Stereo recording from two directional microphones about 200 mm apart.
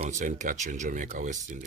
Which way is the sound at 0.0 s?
40° right (ahead or behind).